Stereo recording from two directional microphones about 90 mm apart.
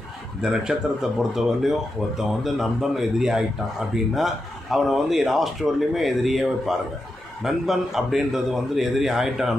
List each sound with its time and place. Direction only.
0.4 s speech: 5° right (ahead or behind)